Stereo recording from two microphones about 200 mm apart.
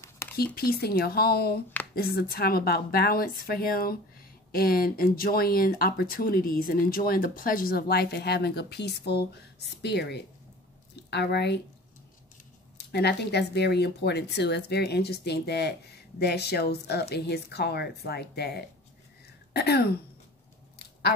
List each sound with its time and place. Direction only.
0.0 s a sound: 15° left (ahead or behind)
0.4 s speech: 50° left (ahead or behind)
12.7 s speech: 55° left (ahead or behind)
19.5 s throat clearing: 55° left (ahead or behind)